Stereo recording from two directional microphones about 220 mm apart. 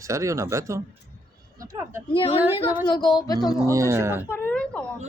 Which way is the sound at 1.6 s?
10° right (ahead or behind).